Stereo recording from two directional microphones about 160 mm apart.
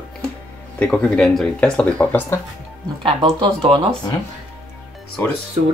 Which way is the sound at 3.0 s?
35° right (ahead or behind).